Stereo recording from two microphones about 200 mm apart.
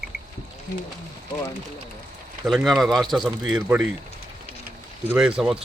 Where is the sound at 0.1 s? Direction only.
60° right (ahead or behind).